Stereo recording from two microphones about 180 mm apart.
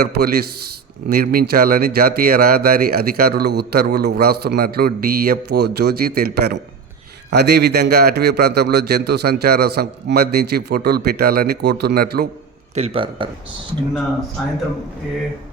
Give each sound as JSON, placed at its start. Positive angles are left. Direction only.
{"t": 0.0, "sound": "speech", "side_deg": -60}
{"t": 12.7, "sound": "a man's voice", "side_deg": -35}